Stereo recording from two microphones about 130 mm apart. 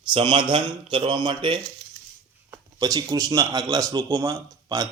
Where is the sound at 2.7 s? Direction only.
30° right (ahead or behind).